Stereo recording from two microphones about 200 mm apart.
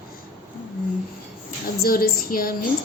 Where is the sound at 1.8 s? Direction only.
45° left (ahead or behind).